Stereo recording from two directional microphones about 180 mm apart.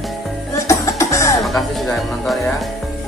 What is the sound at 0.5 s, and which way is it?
Music, 15° left (ahead or behind).